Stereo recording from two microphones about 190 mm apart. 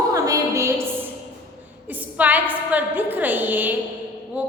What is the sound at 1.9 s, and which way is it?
A woman's voice, 10° right (ahead or behind).